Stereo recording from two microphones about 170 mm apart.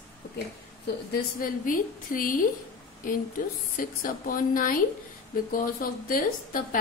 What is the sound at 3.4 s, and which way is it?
A woman's voice, 55° left (ahead or behind).